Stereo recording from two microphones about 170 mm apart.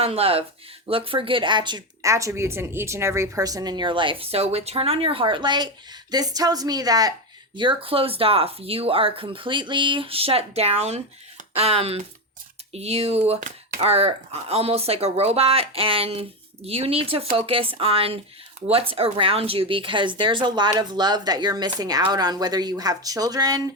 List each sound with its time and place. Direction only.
0.0 s speech: 35° right (ahead or behind)